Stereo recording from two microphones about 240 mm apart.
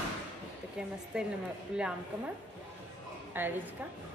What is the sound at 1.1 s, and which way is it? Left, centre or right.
A woman's voice, centre.